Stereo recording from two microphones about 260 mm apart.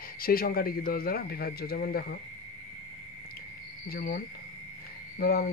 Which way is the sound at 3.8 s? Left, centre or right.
Left.